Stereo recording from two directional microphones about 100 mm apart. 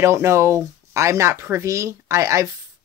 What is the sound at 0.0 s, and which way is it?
Speech, 25° right (ahead or behind).